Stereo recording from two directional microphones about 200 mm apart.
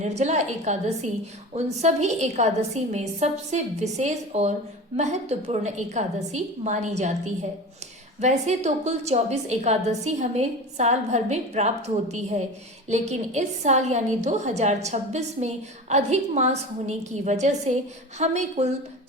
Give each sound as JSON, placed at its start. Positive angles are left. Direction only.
{"t": 0.0, "sound": "a woman's voice", "side_deg": -35}